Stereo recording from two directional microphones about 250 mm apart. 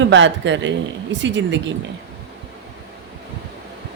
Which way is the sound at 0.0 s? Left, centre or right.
Right.